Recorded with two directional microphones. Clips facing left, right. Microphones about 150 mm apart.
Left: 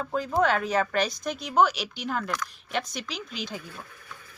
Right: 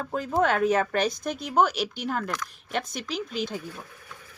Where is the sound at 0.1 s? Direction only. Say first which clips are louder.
Even; 50° right (ahead or behind).